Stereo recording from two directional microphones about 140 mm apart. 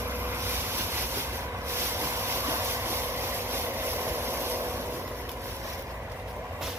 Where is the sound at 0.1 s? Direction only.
15° right (ahead or behind).